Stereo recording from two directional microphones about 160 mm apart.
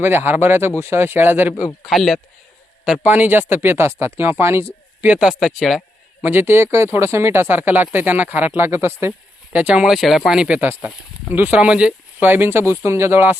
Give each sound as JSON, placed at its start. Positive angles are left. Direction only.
{"t": 0.0, "sound": "speech", "side_deg": -15}
{"t": 6.2, "sound": "speech", "side_deg": -15}